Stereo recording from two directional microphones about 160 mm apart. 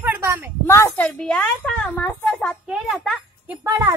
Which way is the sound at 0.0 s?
15° right (ahead or behind).